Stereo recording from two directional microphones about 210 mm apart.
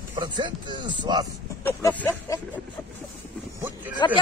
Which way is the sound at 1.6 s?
15° left (ahead or behind).